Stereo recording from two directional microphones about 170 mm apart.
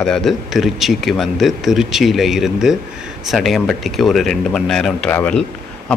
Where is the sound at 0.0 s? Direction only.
Centre (ahead or behind).